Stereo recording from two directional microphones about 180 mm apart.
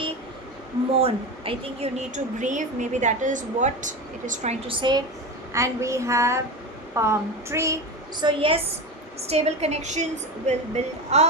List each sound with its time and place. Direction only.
0.9 s speech: 30° right (ahead or behind)
4.7 s a woman's voice: 25° right (ahead or behind)
5.5 s a sound: 15° right (ahead or behind)
8.2 s a woman's voice: 25° right (ahead or behind)